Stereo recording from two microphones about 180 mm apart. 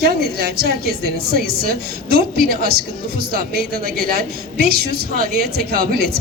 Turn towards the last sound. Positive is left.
turn(degrees=-60)  # may be behind; listen again after turning